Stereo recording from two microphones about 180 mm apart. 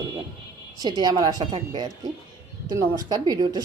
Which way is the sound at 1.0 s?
20° right (ahead or behind).